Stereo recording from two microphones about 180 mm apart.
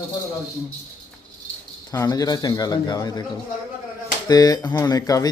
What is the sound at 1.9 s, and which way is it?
Speech, 20° left (ahead or behind).